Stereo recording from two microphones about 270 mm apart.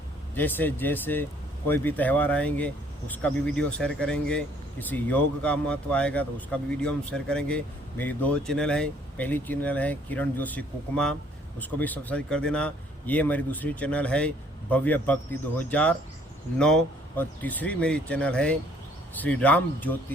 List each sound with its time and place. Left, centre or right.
0.3 s speech: centre